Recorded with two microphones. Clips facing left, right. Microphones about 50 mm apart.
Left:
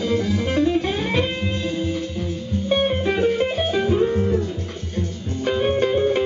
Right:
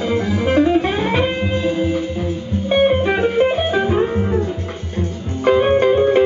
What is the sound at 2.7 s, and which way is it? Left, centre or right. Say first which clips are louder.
Music: right 6 dB; centre.